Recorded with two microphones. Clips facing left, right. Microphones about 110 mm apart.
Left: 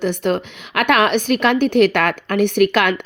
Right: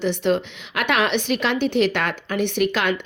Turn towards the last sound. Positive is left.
turn(degrees=55)  # may be behind; listen again after turning